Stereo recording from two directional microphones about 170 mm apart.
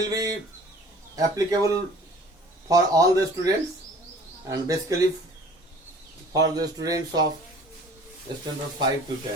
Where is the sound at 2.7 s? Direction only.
20° right (ahead or behind).